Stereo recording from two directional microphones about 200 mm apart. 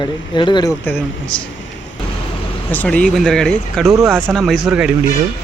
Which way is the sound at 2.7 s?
10° left (ahead or behind).